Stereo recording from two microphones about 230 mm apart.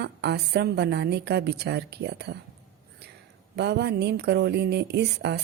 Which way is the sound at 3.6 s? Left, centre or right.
Right.